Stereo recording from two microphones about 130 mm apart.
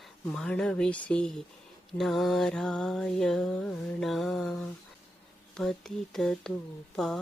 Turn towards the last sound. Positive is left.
turn(degrees=5)  # may be behind; listen again after turning